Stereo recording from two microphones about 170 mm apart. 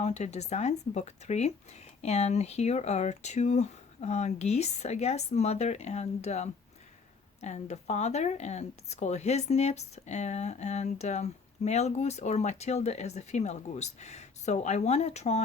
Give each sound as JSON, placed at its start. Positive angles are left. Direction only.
{"t": 0.0, "sound": "speech", "side_deg": 40}